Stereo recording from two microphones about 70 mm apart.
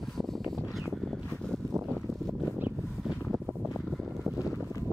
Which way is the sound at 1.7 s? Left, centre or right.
Right.